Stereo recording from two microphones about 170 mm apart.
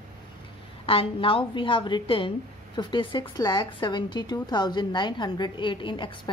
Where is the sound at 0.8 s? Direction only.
30° left (ahead or behind).